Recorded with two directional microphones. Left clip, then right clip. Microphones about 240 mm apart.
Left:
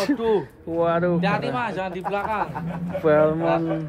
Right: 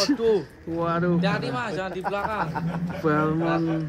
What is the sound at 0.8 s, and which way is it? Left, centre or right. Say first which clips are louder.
Speech: left 4 dB; centre.